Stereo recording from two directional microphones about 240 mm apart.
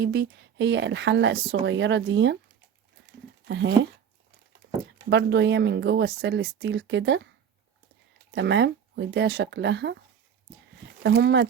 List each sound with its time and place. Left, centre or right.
0.0 s speech: right
3.5 s speech: right
5.0 s speech: right
8.3 s speech: right
11.0 s speech: right